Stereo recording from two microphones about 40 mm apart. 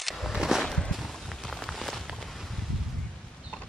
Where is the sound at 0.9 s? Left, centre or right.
Centre.